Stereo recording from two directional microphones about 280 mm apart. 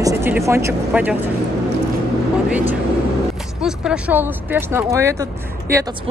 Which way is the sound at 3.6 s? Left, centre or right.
Centre.